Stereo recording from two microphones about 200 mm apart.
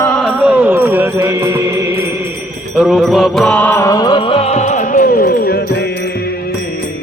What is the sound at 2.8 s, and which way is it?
Music, centre (ahead or behind).